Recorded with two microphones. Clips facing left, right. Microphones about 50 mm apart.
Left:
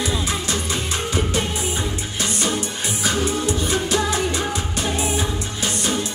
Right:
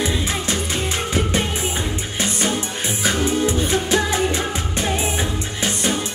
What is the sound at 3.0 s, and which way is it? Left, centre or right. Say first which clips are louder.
Music: right 3 dB; right.